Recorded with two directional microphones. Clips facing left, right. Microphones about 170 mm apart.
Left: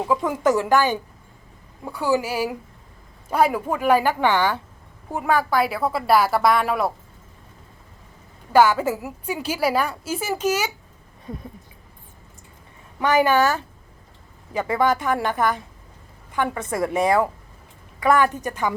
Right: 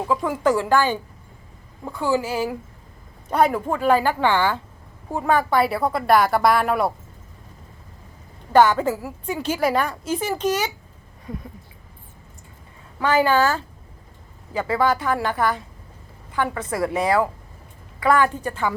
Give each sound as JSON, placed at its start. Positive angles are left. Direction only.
{"t": 0.3, "sound": "a woman's voice", "side_deg": 20}
{"t": 5.2, "sound": "speech", "side_deg": 5}
{"t": 8.5, "sound": "a woman's voice", "side_deg": 5}
{"t": 11.3, "sound": "a woman's voice", "side_deg": 25}
{"t": 13.0, "sound": "a woman's voice", "side_deg": 15}